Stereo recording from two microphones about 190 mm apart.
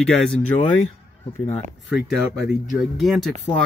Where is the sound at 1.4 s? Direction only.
35° left (ahead or behind).